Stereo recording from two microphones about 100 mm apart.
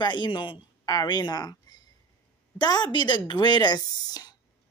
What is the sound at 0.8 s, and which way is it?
Speech, 35° left (ahead or behind).